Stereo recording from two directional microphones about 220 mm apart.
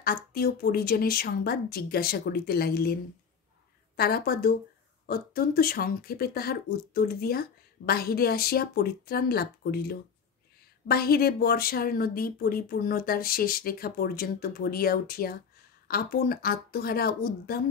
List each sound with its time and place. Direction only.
0.0 s speech: 45° left (ahead or behind)